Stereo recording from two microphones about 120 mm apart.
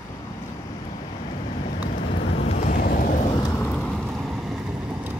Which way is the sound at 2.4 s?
80° left.